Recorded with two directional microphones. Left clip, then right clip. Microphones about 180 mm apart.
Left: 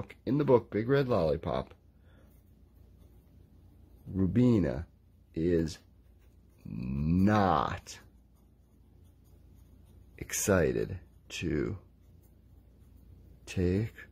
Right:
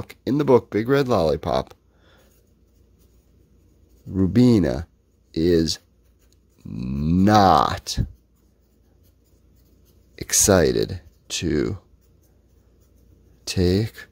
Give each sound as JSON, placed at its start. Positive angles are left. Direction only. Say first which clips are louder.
{"t": 0.0, "sound": "speech", "louder": "right 8 dB", "side_deg": -45}
{"t": 4.1, "sound": "speech", "louder": "right 10 dB", "side_deg": -50}
{"t": 6.8, "sound": "speech", "louder": "right 9 dB", "side_deg": -35}
{"t": 10.1, "sound": "speech", "louder": "right 11 dB", "side_deg": -40}
{"t": 13.5, "sound": "speech", "louder": "right 11 dB", "side_deg": -45}